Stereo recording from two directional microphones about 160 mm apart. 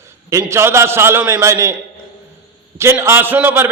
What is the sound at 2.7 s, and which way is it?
Speech, 15° right (ahead or behind).